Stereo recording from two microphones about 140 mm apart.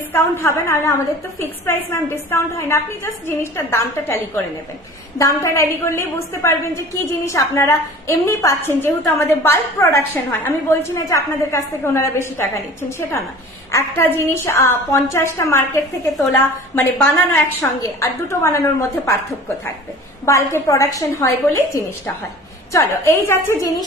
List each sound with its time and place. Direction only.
0.1 s a woman's voice: 15° left (ahead or behind)
2.3 s a woman's voice: 20° left (ahead or behind)
5.2 s a woman's voice: 20° left (ahead or behind)
13.7 s a woman's voice: 20° left (ahead or behind)
20.2 s a woman's voice: 20° left (ahead or behind)